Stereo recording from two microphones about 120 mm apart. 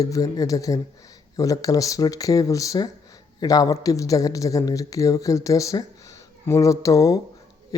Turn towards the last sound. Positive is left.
turn(degrees=25)  # may be behind; listen again after turning